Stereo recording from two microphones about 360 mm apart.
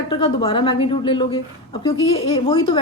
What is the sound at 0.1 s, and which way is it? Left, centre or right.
A woman's voice, centre.